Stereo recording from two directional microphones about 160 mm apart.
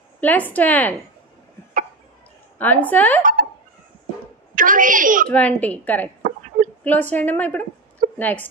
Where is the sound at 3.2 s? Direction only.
55° right (ahead or behind).